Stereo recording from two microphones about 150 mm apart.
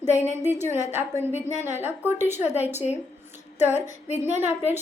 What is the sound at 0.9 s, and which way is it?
Female singing, 50° left (ahead or behind).